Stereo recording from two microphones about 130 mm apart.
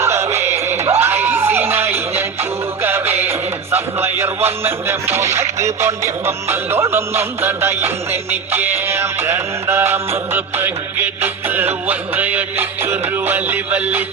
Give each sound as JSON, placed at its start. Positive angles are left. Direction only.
{"t": 0.0, "sound": "music", "side_deg": -20}